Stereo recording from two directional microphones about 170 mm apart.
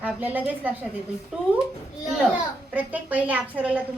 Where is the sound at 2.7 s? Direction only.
10° right (ahead or behind).